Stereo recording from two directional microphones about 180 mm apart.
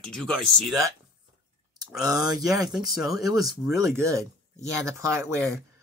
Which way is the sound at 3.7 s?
15° right (ahead or behind).